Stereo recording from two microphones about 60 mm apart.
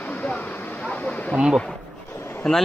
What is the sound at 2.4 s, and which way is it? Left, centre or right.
Speech, centre.